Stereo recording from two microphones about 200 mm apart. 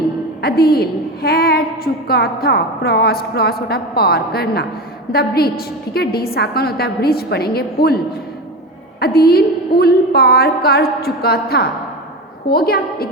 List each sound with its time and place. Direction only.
0.4 s a woman's voice: 50° left (ahead or behind)